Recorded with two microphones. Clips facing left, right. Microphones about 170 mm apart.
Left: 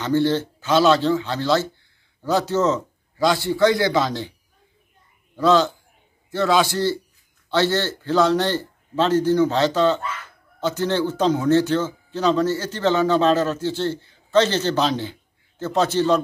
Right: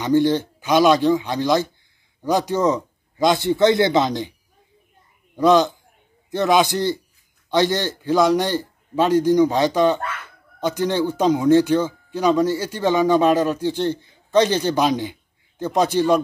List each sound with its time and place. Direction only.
0.0 s a man's voice: 15° right (ahead or behind)
5.3 s speech: 15° right (ahead or behind)